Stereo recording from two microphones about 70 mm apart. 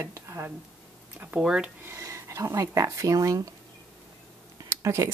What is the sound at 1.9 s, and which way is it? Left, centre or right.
Speech, right.